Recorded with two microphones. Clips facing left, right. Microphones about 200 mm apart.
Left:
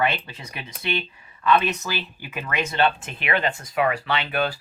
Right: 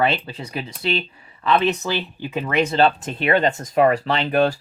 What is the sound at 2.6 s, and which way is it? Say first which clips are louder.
Speech: right 5 dB; 35° right (ahead or behind).